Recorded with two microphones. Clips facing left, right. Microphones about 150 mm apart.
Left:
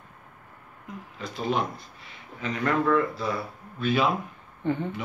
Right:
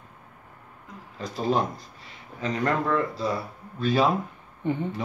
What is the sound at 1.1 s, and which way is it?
Speech, 35° right (ahead or behind).